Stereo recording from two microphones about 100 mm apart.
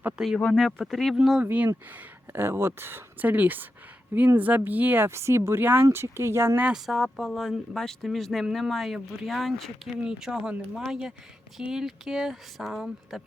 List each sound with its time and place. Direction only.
0.3 s speech: 5° left (ahead or behind)
1.5 s speech: 15° right (ahead or behind)
6.7 s speech: centre (ahead or behind)